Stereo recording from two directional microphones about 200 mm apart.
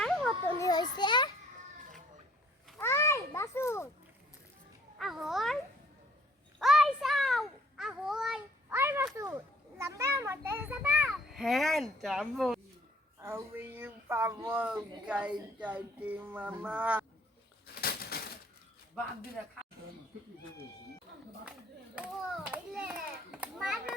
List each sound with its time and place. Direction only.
0.0 s children playing: 5° left (ahead or behind)
0.6 s children playing: 20° left (ahead or behind)
2.7 s children playing: 15° left (ahead or behind)
4.9 s babbling: centre (ahead or behind)
6.6 s a sound: centre (ahead or behind)
9.1 s children playing: 15° right (ahead or behind)
13.2 s speech: 10° right (ahead or behind)
17.7 s crushing: 50° left (ahead or behind)
21.9 s children playing: 5° right (ahead or behind)